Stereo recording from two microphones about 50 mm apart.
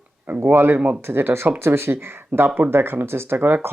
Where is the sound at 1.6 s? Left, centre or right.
Right.